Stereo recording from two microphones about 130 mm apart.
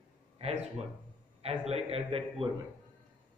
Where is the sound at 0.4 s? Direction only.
50° right (ahead or behind).